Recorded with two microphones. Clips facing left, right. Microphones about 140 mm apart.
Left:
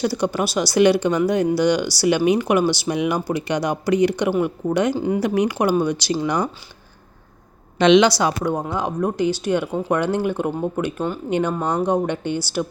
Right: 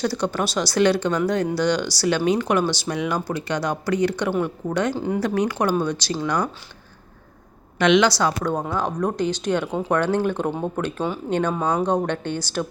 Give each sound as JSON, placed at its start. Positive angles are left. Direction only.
{"t": 0.0, "sound": "speech", "side_deg": 10}
{"t": 7.8, "sound": "speech", "side_deg": 20}
{"t": 11.3, "sound": "speech", "side_deg": 10}
{"t": 11.5, "sound": "speech", "side_deg": -5}
{"t": 11.9, "sound": "speech", "side_deg": 10}